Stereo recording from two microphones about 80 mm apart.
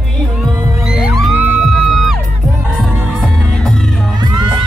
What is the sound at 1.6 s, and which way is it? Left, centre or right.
Music, centre.